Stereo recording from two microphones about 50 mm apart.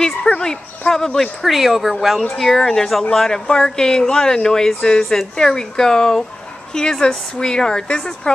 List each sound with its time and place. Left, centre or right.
0.4 s speech: centre
1.5 s speech: centre